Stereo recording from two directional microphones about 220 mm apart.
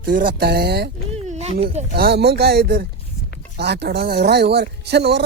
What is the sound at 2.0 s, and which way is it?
Speech, 45° right (ahead or behind).